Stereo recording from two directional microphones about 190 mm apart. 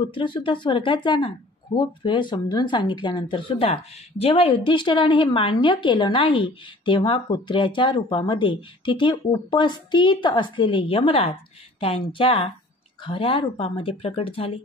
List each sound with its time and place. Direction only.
0.0 s speech: 25° left (ahead or behind)